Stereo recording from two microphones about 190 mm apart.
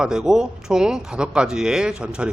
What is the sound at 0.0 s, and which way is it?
Speech, 5° right (ahead or behind).